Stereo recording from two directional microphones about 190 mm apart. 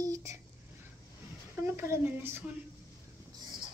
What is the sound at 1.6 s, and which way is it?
Speech, 15° right (ahead or behind).